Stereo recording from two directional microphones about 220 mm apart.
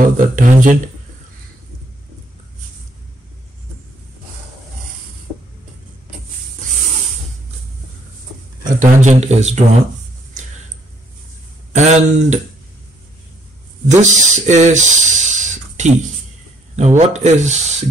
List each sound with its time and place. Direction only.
0.0 s speech: 35° right (ahead or behind)
8.7 s speech: 30° right (ahead or behind)
11.7 s speech: 30° right (ahead or behind)
13.8 s speech: 35° right (ahead or behind)